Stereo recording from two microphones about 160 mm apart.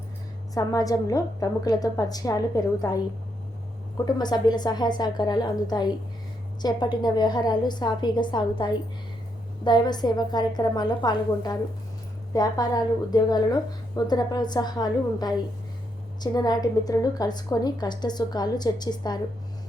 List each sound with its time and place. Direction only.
0.5 s a woman's voice: 20° left (ahead or behind)
3.9 s a woman's voice: 25° left (ahead or behind)